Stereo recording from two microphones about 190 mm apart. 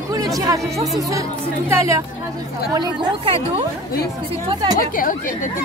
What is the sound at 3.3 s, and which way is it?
Speech, 30° right (ahead or behind).